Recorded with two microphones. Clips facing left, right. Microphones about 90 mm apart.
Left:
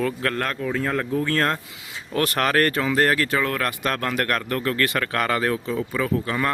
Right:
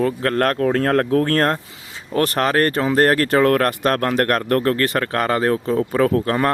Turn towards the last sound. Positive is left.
turn(degrees=-50)  # may be behind; listen again after turning